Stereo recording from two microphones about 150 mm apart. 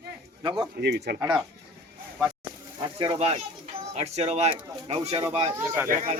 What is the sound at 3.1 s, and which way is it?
Speech, 45° right (ahead or behind).